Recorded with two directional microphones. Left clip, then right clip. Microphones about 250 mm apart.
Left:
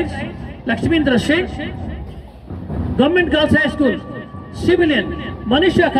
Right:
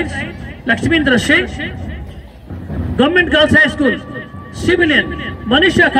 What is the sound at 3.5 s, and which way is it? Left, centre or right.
A man's voice, left.